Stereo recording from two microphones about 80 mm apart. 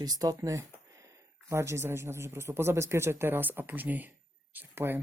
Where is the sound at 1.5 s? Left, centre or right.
Right.